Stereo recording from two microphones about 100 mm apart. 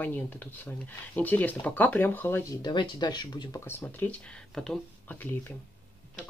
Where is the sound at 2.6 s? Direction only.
45° left (ahead or behind).